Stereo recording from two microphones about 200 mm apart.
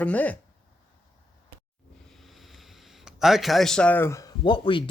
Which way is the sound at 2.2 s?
Centre (ahead or behind).